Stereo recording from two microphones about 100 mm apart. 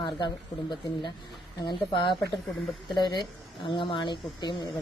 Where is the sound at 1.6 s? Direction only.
50° left (ahead or behind).